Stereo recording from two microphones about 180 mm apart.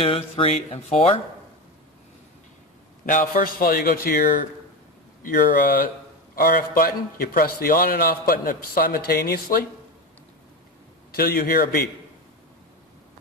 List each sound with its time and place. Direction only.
0.0 s a sound: 30° left (ahead or behind)
3.1 s a man's voice: 50° left (ahead or behind)
11.1 s a man's voice: 55° left (ahead or behind)